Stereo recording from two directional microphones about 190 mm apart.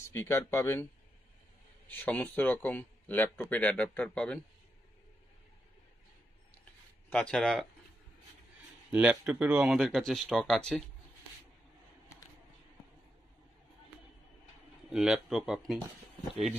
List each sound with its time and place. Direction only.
0.1 s speech: 15° left (ahead or behind)
1.9 s speech: 10° left (ahead or behind)
7.1 s speech: 5° left (ahead or behind)
8.9 s speech: 5° right (ahead or behind)
14.9 s speech: 5° right (ahead or behind)